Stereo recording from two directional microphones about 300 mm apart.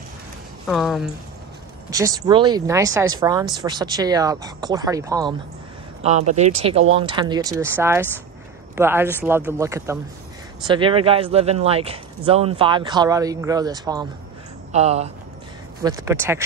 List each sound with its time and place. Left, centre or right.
0.7 s speech: centre
2.0 s speech: centre
6.0 s speech: right
15.8 s speech: centre